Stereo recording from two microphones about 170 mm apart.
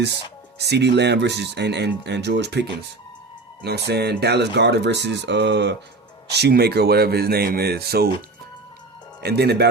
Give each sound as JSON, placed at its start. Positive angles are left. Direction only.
{"t": 0.6, "sound": "speech", "side_deg": -80}
{"t": 6.3, "sound": "speech", "side_deg": -75}
{"t": 9.2, "sound": "speech", "side_deg": -75}